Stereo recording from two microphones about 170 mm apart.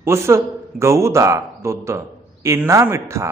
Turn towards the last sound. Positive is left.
turn(degrees=-15)  # may be behind; listen again after turning